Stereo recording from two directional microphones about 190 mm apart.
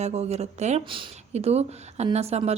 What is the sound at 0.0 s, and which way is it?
Speech, 35° right (ahead or behind).